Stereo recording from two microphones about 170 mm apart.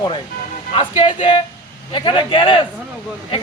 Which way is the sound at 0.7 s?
30° left (ahead or behind).